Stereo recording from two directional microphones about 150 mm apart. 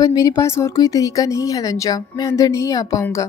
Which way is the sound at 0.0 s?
25° left (ahead or behind).